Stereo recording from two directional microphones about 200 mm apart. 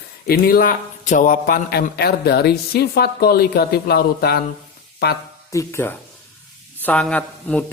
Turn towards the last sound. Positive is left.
turn(degrees=5)  # may be behind; listen again after turning